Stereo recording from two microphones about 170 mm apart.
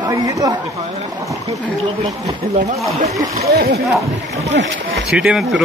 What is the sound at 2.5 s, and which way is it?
Speech, 40° right (ahead or behind).